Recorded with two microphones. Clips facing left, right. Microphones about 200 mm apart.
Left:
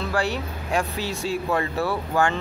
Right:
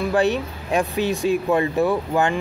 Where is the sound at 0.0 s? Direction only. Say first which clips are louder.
Right 6 dB; 20° right (ahead or behind).